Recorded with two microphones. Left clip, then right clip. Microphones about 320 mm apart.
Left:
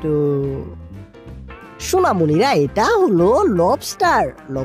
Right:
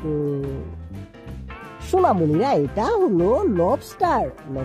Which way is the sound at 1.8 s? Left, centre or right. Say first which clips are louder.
Left 2 dB; left.